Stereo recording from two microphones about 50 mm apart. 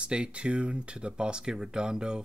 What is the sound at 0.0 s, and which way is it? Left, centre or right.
Speech, right.